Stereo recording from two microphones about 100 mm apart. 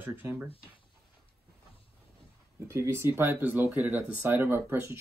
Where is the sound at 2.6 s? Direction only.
25° right (ahead or behind).